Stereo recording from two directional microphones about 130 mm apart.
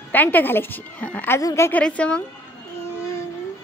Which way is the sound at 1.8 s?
10° left (ahead or behind).